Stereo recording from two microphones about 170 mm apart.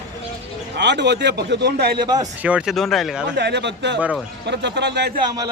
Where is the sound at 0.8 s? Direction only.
90° right.